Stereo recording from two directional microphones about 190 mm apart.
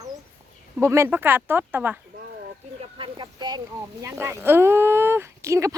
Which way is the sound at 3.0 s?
25° right (ahead or behind).